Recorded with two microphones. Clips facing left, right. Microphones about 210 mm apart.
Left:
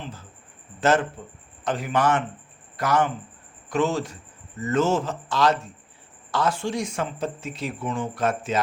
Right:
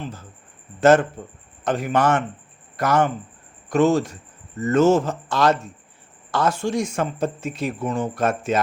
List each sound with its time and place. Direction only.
0.8 s speech: 45° right (ahead or behind)